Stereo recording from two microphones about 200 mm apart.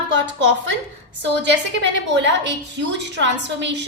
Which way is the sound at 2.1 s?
65° right (ahead or behind).